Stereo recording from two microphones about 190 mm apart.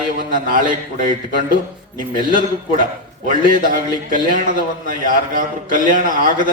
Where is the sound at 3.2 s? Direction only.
45° right (ahead or behind).